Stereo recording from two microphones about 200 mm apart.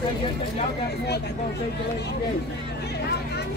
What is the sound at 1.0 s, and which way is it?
Speech, 55° left (ahead or behind).